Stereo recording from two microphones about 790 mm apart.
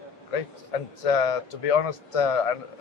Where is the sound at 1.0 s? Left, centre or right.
Left.